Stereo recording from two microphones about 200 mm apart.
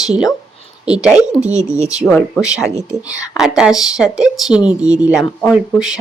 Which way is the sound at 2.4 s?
5° right (ahead or behind).